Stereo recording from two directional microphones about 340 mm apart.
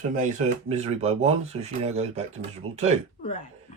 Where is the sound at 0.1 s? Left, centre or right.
Right.